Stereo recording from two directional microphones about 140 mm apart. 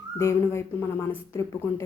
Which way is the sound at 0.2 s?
20° left (ahead or behind).